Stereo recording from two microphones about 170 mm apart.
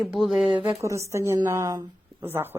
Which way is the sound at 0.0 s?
Centre (ahead or behind).